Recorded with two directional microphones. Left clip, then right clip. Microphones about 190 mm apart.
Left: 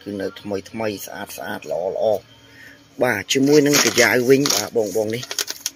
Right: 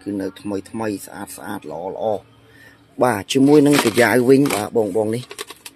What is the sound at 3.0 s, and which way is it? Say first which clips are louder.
Rub: right 1 dB; 25° right (ahead or behind).